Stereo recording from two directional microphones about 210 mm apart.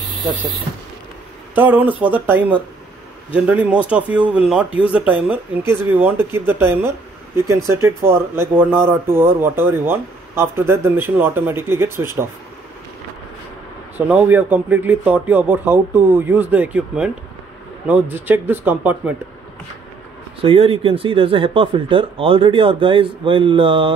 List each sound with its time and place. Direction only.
1.5 s speech: 10° right (ahead or behind)
13.9 s speech: 5° right (ahead or behind)
20.4 s speech: 25° right (ahead or behind)